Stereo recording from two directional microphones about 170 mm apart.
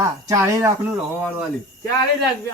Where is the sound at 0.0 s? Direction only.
20° right (ahead or behind).